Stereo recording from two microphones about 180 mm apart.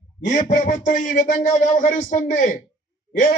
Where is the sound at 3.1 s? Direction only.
50° left (ahead or behind).